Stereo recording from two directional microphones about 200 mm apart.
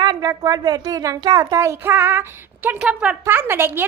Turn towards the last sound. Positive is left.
turn(degrees=-10)  # may be behind; listen again after turning